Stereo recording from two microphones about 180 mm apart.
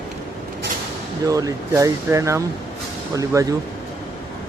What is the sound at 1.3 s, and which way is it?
Speech, 20° right (ahead or behind).